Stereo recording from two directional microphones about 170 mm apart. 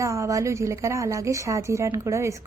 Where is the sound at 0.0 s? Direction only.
20° right (ahead or behind).